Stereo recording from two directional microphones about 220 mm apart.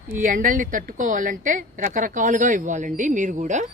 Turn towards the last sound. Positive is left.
turn(degrees=-35)  # may be behind; listen again after turning